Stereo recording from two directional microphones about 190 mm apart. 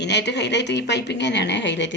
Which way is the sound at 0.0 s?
65° left (ahead or behind).